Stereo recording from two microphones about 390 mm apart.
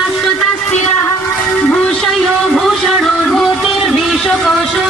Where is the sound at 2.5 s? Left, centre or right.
Centre.